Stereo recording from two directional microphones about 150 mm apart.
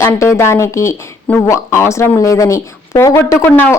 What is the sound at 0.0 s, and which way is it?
Speech, 20° left (ahead or behind).